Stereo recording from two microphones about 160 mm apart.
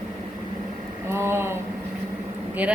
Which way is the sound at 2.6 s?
10° right (ahead or behind).